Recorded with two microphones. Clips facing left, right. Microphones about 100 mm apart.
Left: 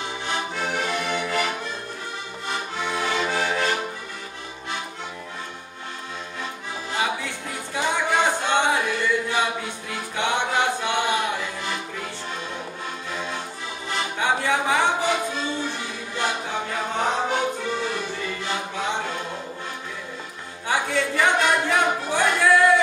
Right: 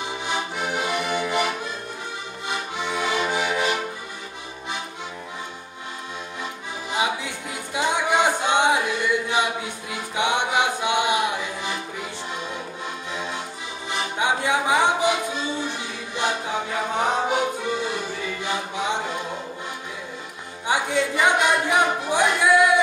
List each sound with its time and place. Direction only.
0.3 s accordion: 15° right (ahead or behind)
6.9 s a capella: 15° right (ahead or behind)
13.8 s music: 15° right (ahead or behind)
17.0 s music: 10° right (ahead or behind)
20.6 s a sound: 15° right (ahead or behind)